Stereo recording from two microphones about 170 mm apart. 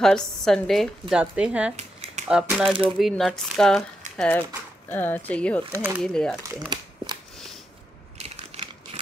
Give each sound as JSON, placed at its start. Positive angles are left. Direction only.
{"t": 0.0, "sound": "a woman's voice", "side_deg": 5}
{"t": 1.8, "sound": "a sound", "side_deg": -40}
{"t": 2.2, "sound": "a woman's voice", "side_deg": -5}
{"t": 5.7, "sound": "speech", "side_deg": -15}
{"t": 6.0, "sound": "a woman's voice", "side_deg": 5}
{"t": 8.2, "sound": "scissors", "side_deg": -35}